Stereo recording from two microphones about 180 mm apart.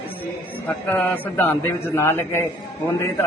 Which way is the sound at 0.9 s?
10° left (ahead or behind).